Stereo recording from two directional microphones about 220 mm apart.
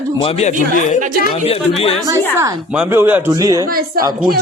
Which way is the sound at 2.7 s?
10° right (ahead or behind).